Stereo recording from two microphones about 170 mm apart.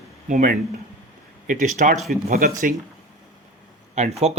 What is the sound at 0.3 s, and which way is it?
Speech, 50° right (ahead or behind).